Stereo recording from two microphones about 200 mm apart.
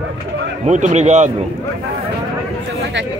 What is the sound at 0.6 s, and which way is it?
Speech, 35° right (ahead or behind).